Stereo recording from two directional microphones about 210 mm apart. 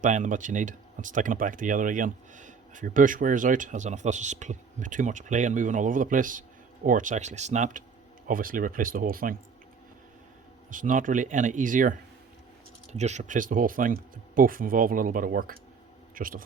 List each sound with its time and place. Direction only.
0.0 s speech: 40° right (ahead or behind)
10.7 s speech: 40° right (ahead or behind)